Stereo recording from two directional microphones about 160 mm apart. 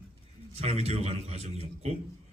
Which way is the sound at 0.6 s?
40° right (ahead or behind).